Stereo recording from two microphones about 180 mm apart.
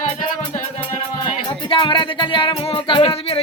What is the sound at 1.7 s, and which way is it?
Music, 25° left (ahead or behind).